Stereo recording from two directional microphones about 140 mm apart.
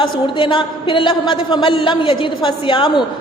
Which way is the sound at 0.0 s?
35° left (ahead or behind).